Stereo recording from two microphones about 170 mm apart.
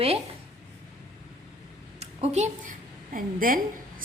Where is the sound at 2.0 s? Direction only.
40° right (ahead or behind).